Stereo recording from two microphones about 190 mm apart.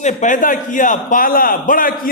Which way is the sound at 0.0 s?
40° left (ahead or behind).